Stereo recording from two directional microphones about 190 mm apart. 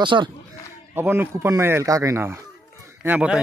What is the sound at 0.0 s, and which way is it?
Speech, 25° right (ahead or behind).